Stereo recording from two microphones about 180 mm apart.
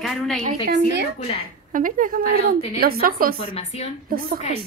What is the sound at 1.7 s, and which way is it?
A woman's voice, 50° right (ahead or behind).